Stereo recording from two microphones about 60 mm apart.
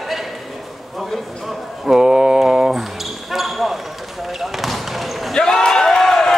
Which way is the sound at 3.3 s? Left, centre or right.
Centre.